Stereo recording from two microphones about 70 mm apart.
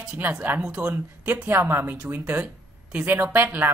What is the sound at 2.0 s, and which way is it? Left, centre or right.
Speech, centre.